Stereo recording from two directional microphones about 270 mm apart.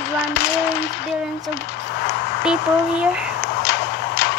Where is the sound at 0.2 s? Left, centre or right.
Left.